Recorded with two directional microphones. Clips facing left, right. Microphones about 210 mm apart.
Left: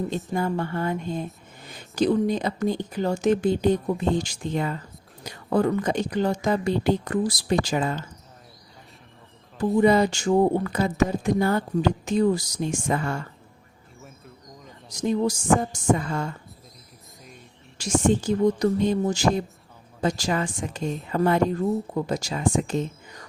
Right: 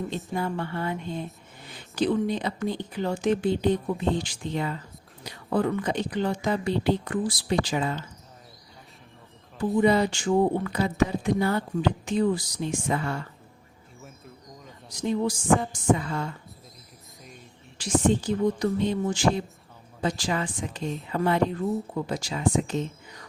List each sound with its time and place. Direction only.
0.3 s speech: 45° left (ahead or behind)
9.8 s speech: 45° left (ahead or behind)
14.8 s speech: 45° left (ahead or behind)
17.7 s speech: 45° left (ahead or behind)